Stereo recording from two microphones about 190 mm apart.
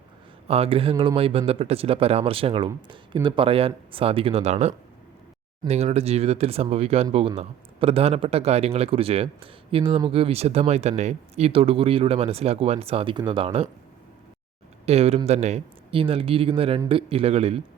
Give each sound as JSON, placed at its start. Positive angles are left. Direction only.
{"t": 0.4, "sound": "speech", "side_deg": -30}
{"t": 14.8, "sound": "speech", "side_deg": -30}